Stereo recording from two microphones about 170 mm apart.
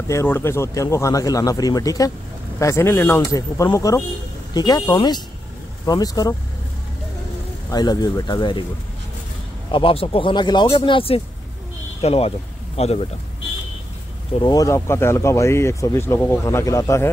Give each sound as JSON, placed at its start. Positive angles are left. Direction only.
{"t": 0.1, "sound": "speech", "side_deg": 15}
{"t": 7.7, "sound": "speech", "side_deg": 25}
{"t": 9.7, "sound": "speech", "side_deg": 30}
{"t": 14.4, "sound": "speech", "side_deg": 20}